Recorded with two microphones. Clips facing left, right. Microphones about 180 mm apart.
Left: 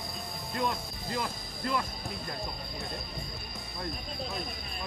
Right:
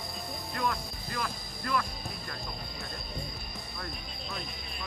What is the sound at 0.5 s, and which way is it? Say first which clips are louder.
Speech: left 1 dB; 20° left (ahead or behind).